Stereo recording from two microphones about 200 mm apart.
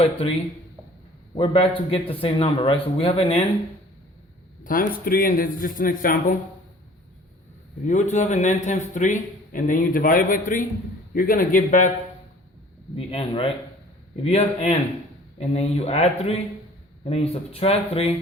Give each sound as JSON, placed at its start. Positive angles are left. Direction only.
{"t": 1.4, "sound": "a man's voice", "side_deg": 25}
{"t": 4.6, "sound": "a man's voice", "side_deg": 45}
{"t": 7.9, "sound": "a man's voice", "side_deg": 40}
{"t": 13.0, "sound": "a man's voice", "side_deg": 25}